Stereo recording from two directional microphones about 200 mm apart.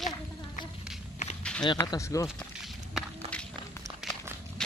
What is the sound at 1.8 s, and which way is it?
Speech, 15° left (ahead or behind).